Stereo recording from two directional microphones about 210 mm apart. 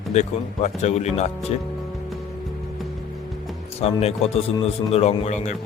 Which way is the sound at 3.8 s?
30° left (ahead or behind).